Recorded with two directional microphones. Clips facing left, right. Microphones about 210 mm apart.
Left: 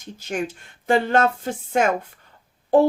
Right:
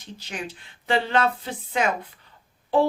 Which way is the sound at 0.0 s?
45° left (ahead or behind).